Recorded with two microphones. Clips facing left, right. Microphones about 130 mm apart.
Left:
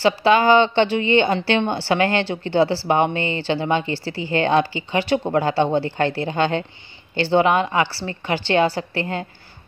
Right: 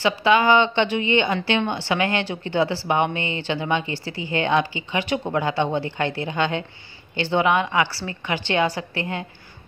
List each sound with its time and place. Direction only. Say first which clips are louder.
0.0 s speech: left 2 dB; 35° left (ahead or behind)